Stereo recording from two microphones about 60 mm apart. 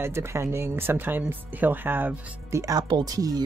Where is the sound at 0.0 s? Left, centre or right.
Right.